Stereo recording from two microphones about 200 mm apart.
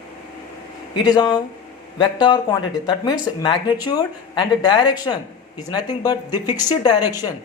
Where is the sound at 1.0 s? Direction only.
20° left (ahead or behind).